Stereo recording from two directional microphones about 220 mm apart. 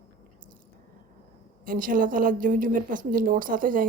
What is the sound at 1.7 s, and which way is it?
A woman's voice, 40° right (ahead or behind).